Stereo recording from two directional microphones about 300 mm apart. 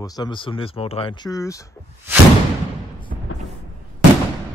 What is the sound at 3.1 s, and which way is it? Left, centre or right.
Music, right.